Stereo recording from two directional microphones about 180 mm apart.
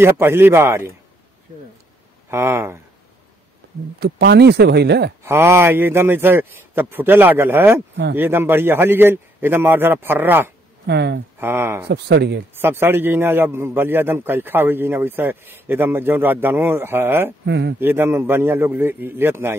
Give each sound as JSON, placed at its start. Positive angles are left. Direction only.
{"t": 0.0, "sound": "a man's voice", "side_deg": -15}
{"t": 2.2, "sound": "a man's voice", "side_deg": -15}
{"t": 4.0, "sound": "speech", "side_deg": -65}
{"t": 5.2, "sound": "a man's voice", "side_deg": -15}
{"t": 10.9, "sound": "speech", "side_deg": -70}
{"t": 11.3, "sound": "speech", "side_deg": -10}
{"t": 11.9, "sound": "speech", "side_deg": -70}
{"t": 12.5, "sound": "a man's voice", "side_deg": -10}
{"t": 17.5, "sound": "speech", "side_deg": -70}
{"t": 17.7, "sound": "a man's voice", "side_deg": -10}